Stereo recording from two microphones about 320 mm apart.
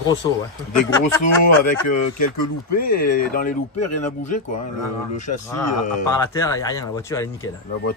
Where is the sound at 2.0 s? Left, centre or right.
Left.